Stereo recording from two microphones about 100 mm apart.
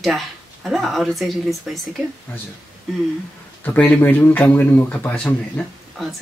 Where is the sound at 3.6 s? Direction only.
20° left (ahead or behind).